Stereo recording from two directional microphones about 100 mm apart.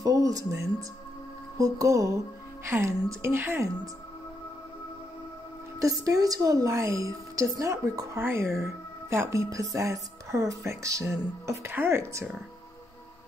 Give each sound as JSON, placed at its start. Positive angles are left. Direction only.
{"t": 0.0, "sound": "music", "side_deg": -35}
{"t": 1.6, "sound": "a woman's voice", "side_deg": -35}
{"t": 5.8, "sound": "a woman's voice", "side_deg": -35}